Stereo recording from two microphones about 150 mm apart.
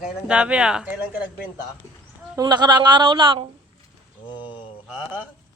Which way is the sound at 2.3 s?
30° right (ahead or behind).